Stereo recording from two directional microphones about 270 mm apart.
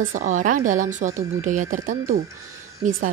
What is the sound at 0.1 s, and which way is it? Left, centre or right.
A woman's voice, right.